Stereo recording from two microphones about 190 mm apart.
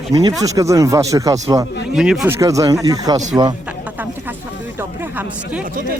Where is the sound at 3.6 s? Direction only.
10° right (ahead or behind).